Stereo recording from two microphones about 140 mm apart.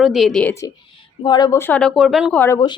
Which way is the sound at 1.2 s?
30° left (ahead or behind).